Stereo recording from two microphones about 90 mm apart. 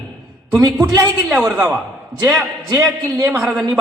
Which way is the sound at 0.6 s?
25° right (ahead or behind).